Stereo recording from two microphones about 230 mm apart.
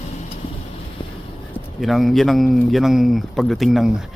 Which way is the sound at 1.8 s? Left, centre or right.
Centre.